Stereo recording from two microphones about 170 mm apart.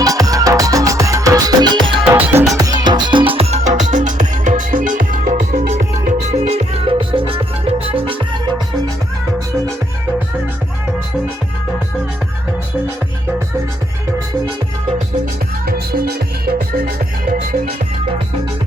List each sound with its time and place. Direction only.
0.0 s music: 20° right (ahead or behind)
2.1 s music: 10° right (ahead or behind); by 8.1 s 35° right (ahead or behind)
15.6 s music: 60° right (ahead or behind)